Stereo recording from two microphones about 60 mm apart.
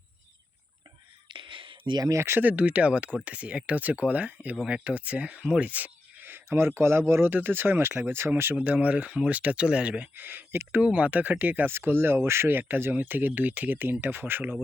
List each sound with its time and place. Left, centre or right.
2.0 s speech: right
2.4 s speech: right
7.3 s speech: right
8.5 s speech: right
10.2 s speech: right
10.7 s speech: right
11.7 s speech: right